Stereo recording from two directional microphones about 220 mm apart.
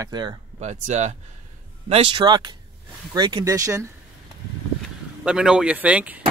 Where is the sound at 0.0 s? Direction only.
20° right (ahead or behind).